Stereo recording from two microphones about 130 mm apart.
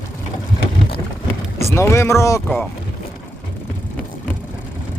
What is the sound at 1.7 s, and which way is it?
Speech, 20° left (ahead or behind).